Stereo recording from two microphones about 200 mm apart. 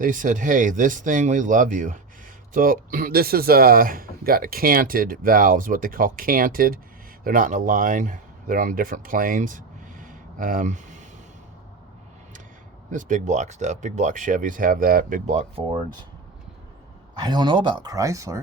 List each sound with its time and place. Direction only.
0.0 s speech: 40° right (ahead or behind)
12.9 s speech: 40° right (ahead or behind)
17.2 s speech: 20° right (ahead or behind)